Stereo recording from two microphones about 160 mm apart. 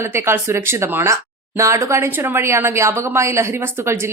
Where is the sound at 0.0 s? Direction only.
15° right (ahead or behind).